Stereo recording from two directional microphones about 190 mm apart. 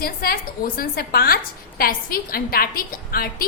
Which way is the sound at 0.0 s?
50° left (ahead or behind).